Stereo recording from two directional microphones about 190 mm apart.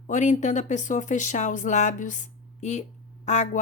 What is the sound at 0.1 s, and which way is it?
Speech, 40° left (ahead or behind).